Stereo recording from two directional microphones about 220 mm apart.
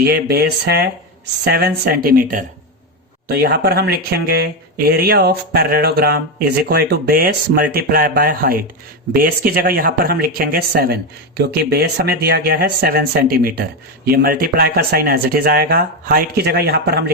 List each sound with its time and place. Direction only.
0.0 s speech: 45° right (ahead or behind)